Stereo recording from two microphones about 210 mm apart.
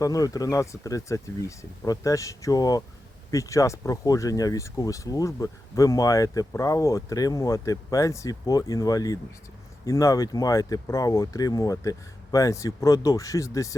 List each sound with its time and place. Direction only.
0.0 s speech: 15° left (ahead or behind)